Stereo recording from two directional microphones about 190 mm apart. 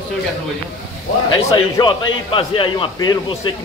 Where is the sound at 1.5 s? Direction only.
25° left (ahead or behind).